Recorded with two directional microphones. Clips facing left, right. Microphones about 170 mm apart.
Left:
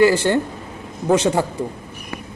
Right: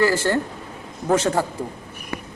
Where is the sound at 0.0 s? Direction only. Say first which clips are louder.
Left 4 dB; 20° left (ahead or behind).